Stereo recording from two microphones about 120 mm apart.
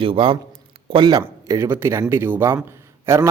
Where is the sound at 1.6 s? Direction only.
20° right (ahead or behind).